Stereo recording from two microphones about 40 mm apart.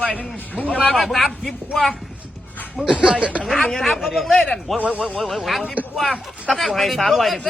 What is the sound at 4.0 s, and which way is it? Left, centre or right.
Speech, centre.